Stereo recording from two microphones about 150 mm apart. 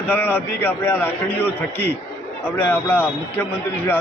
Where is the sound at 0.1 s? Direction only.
10° left (ahead or behind).